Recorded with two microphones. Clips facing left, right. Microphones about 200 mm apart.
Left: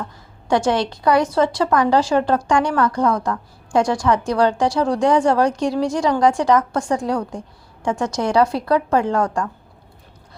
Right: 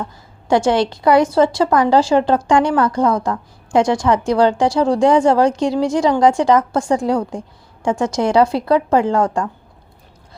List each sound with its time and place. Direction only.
0.0 s a woman's voice: 30° right (ahead or behind)